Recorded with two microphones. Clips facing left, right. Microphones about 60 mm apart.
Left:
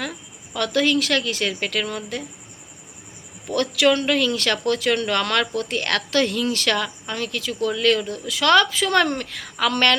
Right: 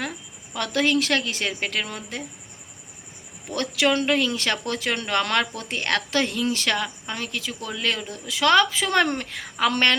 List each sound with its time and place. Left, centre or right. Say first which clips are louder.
0.1 s a woman's voice: left 2 dB; right
3.5 s speech: left 4 dB; right